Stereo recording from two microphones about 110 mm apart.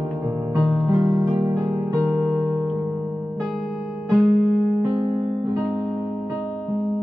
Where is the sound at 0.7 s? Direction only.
30° right (ahead or behind).